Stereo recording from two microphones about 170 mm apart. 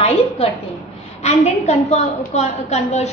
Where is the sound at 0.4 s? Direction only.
35° left (ahead or behind).